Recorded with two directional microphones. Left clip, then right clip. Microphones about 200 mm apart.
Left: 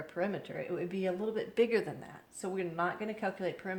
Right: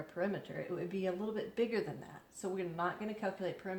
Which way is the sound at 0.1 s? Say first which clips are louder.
Left 3 dB; 35° left (ahead or behind).